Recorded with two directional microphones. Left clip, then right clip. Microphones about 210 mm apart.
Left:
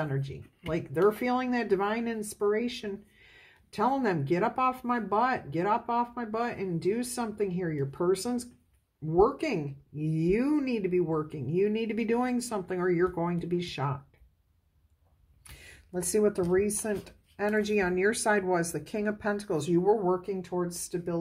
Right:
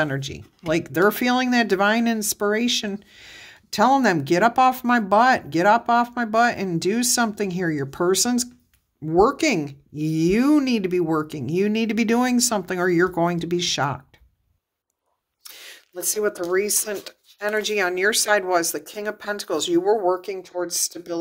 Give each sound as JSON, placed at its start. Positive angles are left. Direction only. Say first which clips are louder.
{"t": 0.0, "sound": "speech", "louder": "right 10 dB", "side_deg": -45}
{"t": 15.6, "sound": "a sound", "louder": "right 5 dB", "side_deg": -30}
{"t": 16.5, "sound": "speech", "louder": "right 5 dB", "side_deg": -35}